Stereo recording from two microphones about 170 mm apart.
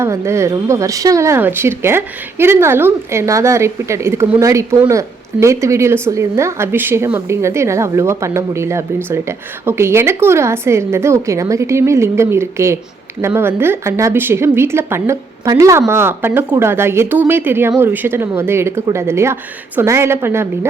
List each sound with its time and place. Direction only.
0.0 s speech: 15° right (ahead or behind)